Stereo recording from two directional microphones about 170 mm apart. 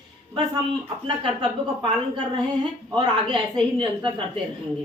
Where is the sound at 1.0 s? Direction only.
30° right (ahead or behind).